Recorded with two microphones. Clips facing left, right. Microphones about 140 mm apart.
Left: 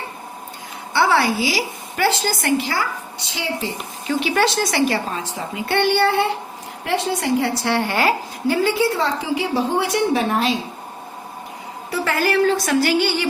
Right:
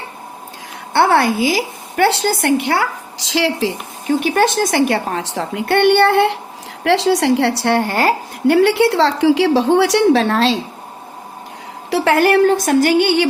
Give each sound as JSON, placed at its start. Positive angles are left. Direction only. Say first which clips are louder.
{"t": 0.9, "sound": "a woman's voice", "louder": "right 4 dB", "side_deg": -55}
{"t": 4.0, "sound": "a woman's voice", "louder": "right 4 dB", "side_deg": -50}
{"t": 6.8, "sound": "a woman's voice", "louder": "right 8 dB", "side_deg": -90}
{"t": 7.8, "sound": "speech", "louder": "right 3 dB", "side_deg": -45}
{"t": 8.4, "sound": "a woman's voice", "louder": "right 6 dB", "side_deg": -70}
{"t": 11.9, "sound": "a woman's voice", "louder": "right 7 dB", "side_deg": -70}